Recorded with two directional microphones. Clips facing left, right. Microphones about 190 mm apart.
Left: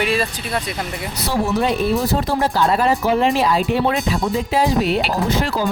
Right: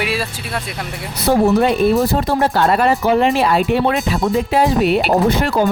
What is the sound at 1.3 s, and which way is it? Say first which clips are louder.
Speech: right 6 dB; 55° right (ahead or behind).